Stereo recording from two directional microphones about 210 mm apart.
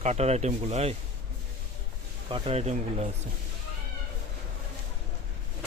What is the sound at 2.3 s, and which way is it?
Speech, 25° right (ahead or behind).